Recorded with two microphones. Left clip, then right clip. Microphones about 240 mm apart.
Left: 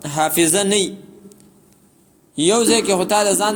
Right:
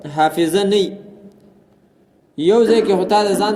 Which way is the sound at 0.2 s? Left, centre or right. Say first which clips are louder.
Right 2 dB; left.